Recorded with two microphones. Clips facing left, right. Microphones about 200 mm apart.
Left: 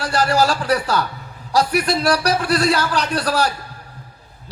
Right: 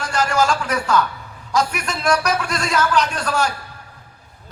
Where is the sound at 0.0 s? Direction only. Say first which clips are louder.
Left 2 dB; 35° left (ahead or behind).